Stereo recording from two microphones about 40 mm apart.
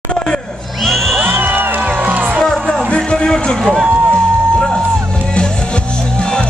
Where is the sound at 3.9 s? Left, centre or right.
Right.